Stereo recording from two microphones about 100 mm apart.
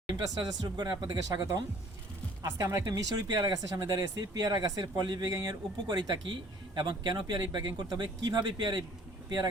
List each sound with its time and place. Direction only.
0.1 s speech: 40° right (ahead or behind)